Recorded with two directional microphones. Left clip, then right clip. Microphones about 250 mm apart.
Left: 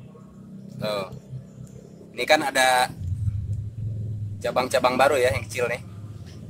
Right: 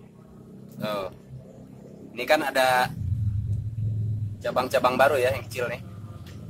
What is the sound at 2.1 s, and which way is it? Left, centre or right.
Speech, centre.